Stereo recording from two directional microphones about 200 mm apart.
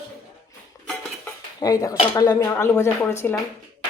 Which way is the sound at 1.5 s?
20° left (ahead or behind).